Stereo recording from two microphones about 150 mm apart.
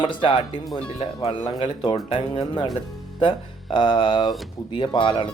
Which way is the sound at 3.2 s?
30° left (ahead or behind).